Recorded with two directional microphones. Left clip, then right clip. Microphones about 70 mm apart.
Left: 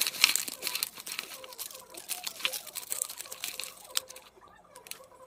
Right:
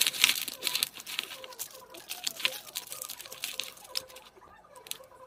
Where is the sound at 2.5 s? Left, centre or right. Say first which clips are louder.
Left 1 dB; left.